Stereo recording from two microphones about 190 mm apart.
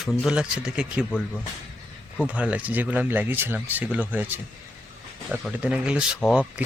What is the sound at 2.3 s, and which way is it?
Speech, 5° right (ahead or behind).